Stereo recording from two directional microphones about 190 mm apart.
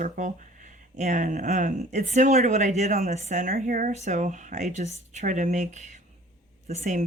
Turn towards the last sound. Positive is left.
turn(degrees=-40)  # may be behind; listen again after turning